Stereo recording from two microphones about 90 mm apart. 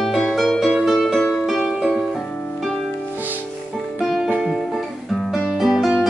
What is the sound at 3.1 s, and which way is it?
Music, 20° right (ahead or behind).